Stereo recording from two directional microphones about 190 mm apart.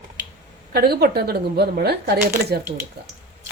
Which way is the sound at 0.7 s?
55° right (ahead or behind).